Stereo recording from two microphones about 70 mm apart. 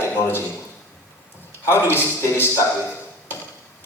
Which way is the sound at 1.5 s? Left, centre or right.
Left.